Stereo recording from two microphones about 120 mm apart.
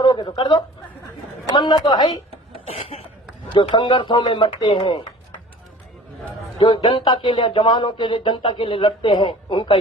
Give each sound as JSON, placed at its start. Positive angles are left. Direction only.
{"t": 0.0, "sound": "speech", "side_deg": 40}
{"t": 3.8, "sound": "speech", "side_deg": 40}
{"t": 6.6, "sound": "speech", "side_deg": 40}